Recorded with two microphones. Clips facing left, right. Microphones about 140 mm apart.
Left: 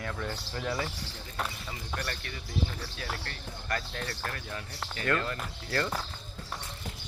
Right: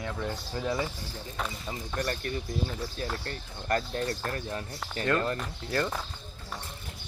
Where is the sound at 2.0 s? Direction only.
30° right (ahead or behind).